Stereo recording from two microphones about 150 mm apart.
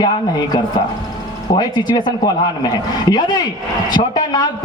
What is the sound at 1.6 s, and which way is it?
A man's voice, 30° left (ahead or behind).